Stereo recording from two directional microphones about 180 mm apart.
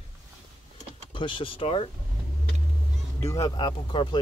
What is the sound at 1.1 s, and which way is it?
Speech, 30° left (ahead or behind).